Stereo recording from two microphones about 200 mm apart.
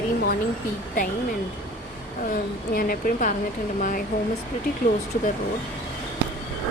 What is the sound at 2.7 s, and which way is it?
Speech, 45° left (ahead or behind).